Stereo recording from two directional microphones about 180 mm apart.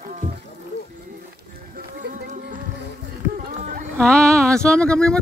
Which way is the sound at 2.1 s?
50° right (ahead or behind).